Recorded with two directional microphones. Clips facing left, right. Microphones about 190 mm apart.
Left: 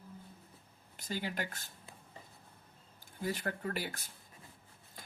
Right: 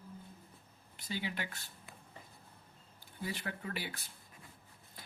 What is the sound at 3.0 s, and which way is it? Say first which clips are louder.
Speech: left 4 dB; 45° left (ahead or behind).